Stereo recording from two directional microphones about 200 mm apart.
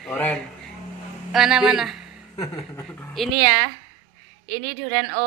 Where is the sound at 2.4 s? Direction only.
15° left (ahead or behind).